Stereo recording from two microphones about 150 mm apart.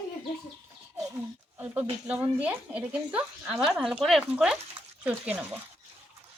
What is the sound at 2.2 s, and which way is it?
A woman's voice, 10° right (ahead or behind).